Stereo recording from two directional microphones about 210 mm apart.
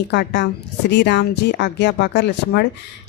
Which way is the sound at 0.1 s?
55° left (ahead or behind).